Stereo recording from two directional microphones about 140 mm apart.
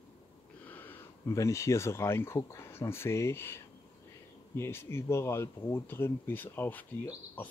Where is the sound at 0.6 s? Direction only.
15° left (ahead or behind).